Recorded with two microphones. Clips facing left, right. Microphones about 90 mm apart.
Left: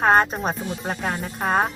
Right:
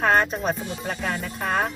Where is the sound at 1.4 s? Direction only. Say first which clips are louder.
Left 4 dB; 40° left (ahead or behind).